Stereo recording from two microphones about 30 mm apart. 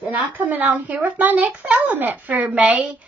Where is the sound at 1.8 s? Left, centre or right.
Right.